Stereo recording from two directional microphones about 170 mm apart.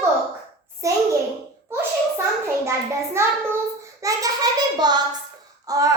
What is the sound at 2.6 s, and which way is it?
Hands, 15° right (ahead or behind).